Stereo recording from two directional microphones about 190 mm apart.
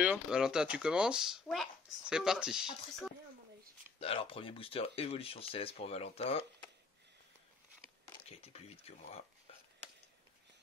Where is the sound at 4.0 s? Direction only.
30° left (ahead or behind).